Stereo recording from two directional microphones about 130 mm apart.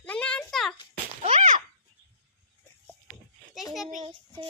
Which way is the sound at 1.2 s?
65° right (ahead or behind).